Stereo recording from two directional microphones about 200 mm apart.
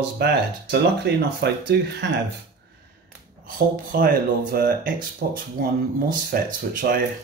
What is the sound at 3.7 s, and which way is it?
Speech, 45° right (ahead or behind).